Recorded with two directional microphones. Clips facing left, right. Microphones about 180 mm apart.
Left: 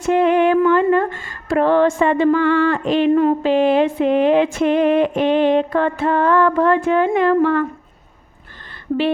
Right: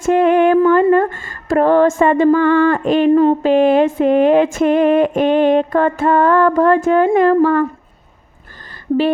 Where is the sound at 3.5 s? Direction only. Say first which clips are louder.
Right 3 dB; 50° right (ahead or behind).